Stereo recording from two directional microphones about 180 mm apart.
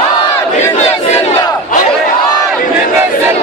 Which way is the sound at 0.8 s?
40° left (ahead or behind).